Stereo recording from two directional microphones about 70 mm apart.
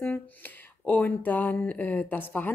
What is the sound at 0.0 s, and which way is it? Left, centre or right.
Speech, left.